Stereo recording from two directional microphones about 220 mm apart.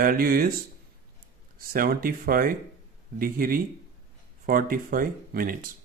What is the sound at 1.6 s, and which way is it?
Speech, 40° right (ahead or behind).